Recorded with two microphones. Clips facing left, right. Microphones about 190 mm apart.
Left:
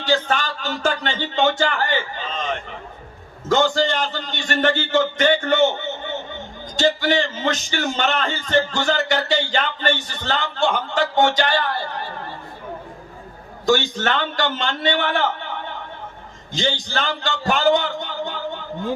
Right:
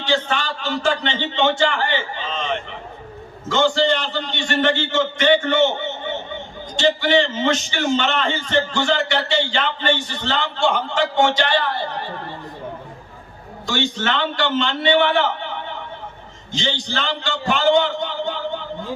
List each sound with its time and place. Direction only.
0.0 s a man's voice: 40° left (ahead or behind)
6.7 s a man's voice: 40° left (ahead or behind)
13.7 s a man's voice: 45° left (ahead or behind)
16.6 s a man's voice: 45° left (ahead or behind)